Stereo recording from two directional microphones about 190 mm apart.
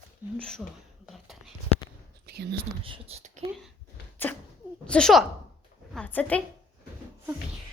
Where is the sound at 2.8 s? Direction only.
30° right (ahead or behind).